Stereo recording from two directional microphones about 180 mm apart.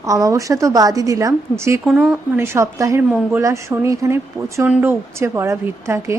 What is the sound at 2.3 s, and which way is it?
Speech, 15° right (ahead or behind).